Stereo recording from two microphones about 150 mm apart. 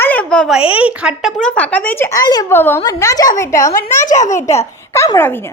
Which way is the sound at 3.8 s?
60° left (ahead or behind).